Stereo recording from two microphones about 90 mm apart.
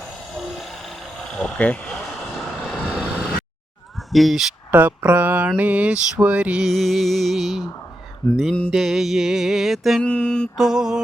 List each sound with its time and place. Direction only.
1.5 s mantra: 15° left (ahead or behind)
2.7 s vehicle: 10° right (ahead or behind)
4.1 s music: centre (ahead or behind)
4.7 s mantra: 20° right (ahead or behind)
6.6 s music: centre (ahead or behind)
8.2 s mantra: 15° left (ahead or behind)
8.7 s music: centre (ahead or behind)
10.0 s mantra: 10° left (ahead or behind)
10.6 s mantra: 5° right (ahead or behind)